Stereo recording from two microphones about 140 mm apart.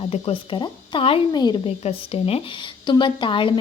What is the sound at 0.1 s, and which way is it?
Speech, 45° left (ahead or behind).